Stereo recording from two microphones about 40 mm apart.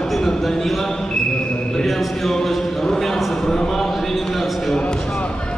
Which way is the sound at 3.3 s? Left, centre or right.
Centre.